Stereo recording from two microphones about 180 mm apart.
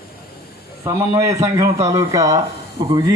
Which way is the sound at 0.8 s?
15° right (ahead or behind).